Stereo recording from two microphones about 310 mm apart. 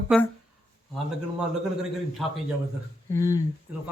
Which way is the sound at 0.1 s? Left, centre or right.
Centre.